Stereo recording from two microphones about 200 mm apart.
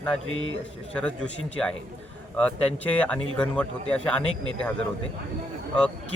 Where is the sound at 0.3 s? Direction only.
80° left.